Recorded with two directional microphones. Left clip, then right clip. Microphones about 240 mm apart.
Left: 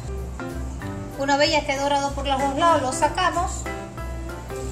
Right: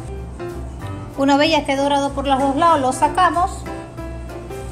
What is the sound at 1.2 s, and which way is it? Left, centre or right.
A woman's voice, right.